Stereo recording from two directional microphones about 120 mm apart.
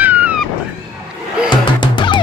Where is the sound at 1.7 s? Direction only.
40° left (ahead or behind).